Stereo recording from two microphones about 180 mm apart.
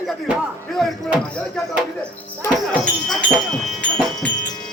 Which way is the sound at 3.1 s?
Centre (ahead or behind).